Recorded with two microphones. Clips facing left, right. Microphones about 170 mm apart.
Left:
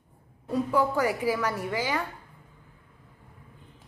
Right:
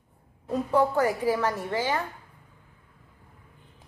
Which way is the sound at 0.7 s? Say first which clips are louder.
Right 3 dB; 10° left (ahead or behind).